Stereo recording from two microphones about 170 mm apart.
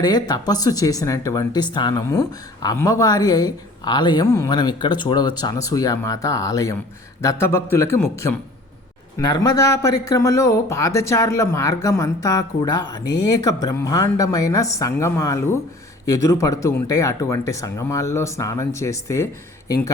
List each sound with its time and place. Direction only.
0.0 s a man's voice: 25° left (ahead or behind)